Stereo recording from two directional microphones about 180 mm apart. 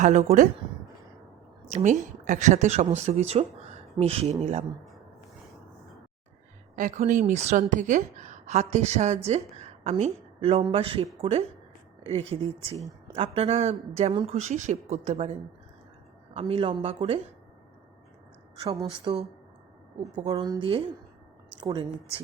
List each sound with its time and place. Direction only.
0.0 s speech: 40° right (ahead or behind)
1.7 s speech: 40° right (ahead or behind)
6.7 s a woman's voice: 45° right (ahead or behind)
18.9 s speech: 30° right (ahead or behind)